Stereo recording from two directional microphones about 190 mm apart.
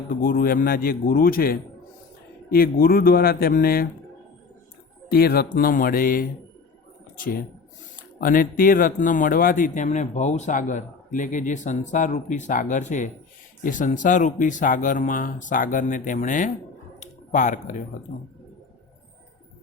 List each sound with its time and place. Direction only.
0.2 s speech: 50° left (ahead or behind)
5.1 s speech: 55° left (ahead or behind)
8.2 s speech: 50° left (ahead or behind)
17.0 s a sound: 40° left (ahead or behind)
18.1 s speech: 40° left (ahead or behind)